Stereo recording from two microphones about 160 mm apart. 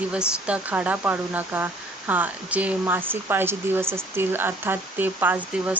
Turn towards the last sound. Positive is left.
turn(degrees=-10)  # may be behind; listen again after turning